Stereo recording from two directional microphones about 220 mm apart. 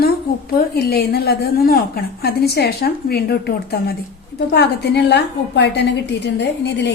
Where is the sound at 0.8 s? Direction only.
45° left (ahead or behind).